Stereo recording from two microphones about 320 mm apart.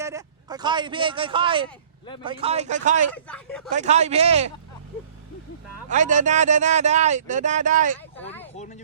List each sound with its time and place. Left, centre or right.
0.0 s speech: centre
3.1 s speech: centre
3.7 s speech: right
5.9 s speech: right
8.1 s a sound: centre